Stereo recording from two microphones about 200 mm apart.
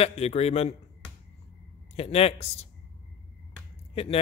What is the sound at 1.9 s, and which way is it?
Speech, 30° left (ahead or behind).